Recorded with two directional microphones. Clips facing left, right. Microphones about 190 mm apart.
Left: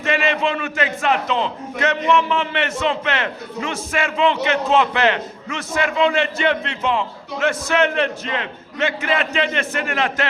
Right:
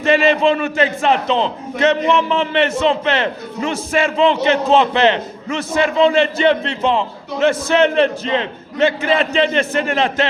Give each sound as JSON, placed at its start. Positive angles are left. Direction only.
{"t": 0.0, "sound": "a man's voice", "side_deg": -30}